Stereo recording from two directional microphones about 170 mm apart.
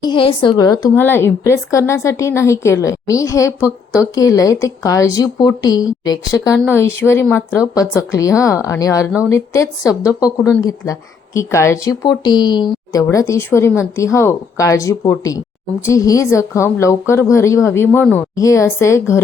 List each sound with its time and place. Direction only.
0.0 s speech: 30° left (ahead or behind)